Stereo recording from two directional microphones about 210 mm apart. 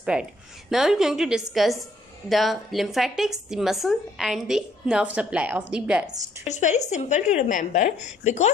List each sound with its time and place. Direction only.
0.0 s a woman's voice: 5° right (ahead or behind)
6.4 s a woman's voice: 35° left (ahead or behind)